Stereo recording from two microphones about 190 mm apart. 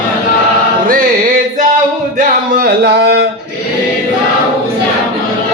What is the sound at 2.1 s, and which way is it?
Music, 50° right (ahead or behind).